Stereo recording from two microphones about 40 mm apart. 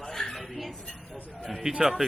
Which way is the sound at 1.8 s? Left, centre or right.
Centre.